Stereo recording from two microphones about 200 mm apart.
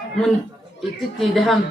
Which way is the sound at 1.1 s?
Centre (ahead or behind).